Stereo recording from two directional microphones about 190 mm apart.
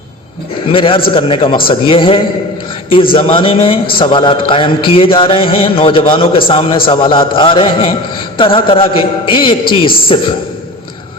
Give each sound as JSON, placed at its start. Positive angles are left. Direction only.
{"t": 0.7, "sound": "a man's voice", "side_deg": 30}